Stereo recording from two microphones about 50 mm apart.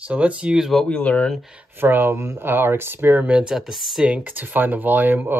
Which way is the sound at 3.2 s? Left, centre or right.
Right.